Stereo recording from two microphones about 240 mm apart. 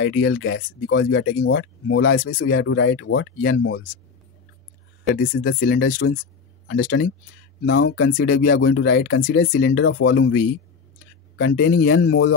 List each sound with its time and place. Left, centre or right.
0.0 s speech: left
5.1 s speech: left
5.6 s speech: left
7.6 s speech: left